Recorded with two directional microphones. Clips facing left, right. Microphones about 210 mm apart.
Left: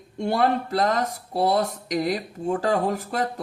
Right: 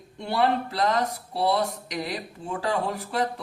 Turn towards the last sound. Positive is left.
turn(degrees=45)  # may be behind; listen again after turning